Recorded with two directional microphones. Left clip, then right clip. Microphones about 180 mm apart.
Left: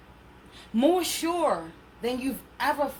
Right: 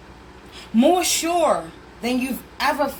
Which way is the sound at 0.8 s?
40° left (ahead or behind).